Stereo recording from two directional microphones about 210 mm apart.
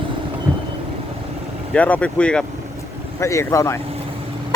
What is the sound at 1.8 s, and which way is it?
Speech, 5° left (ahead or behind).